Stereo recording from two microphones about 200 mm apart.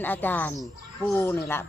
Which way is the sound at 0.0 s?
10° left (ahead or behind).